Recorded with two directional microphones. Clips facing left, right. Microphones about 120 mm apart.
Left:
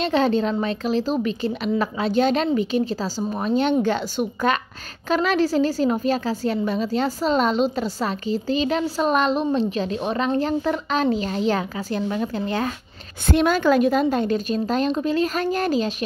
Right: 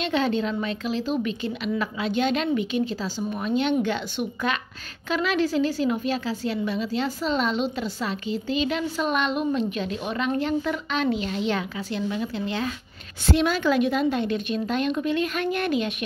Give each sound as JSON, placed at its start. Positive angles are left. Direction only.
{"t": 0.0, "sound": "a woman's voice", "side_deg": 40}